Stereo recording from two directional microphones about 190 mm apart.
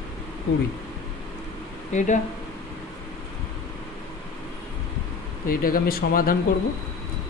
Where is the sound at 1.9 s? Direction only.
40° left (ahead or behind).